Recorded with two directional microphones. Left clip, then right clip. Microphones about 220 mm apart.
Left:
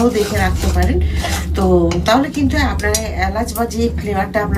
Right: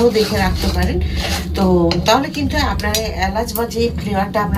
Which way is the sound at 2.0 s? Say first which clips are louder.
Left 1 dB; 10° left (ahead or behind).